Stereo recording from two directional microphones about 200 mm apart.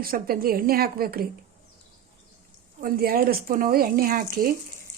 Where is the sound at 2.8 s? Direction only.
45° right (ahead or behind).